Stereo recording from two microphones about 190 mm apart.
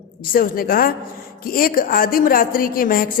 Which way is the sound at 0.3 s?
50° left (ahead or behind).